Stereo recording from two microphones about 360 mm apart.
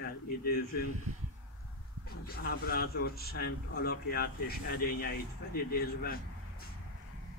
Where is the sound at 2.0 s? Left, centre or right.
Left.